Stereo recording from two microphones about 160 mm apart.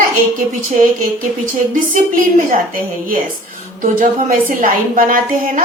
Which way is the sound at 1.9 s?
55° right (ahead or behind).